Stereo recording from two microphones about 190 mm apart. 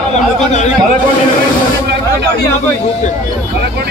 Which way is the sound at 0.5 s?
35° left (ahead or behind).